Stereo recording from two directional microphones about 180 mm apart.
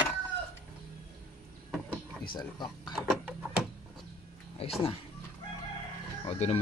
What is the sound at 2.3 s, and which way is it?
Speech, 25° left (ahead or behind).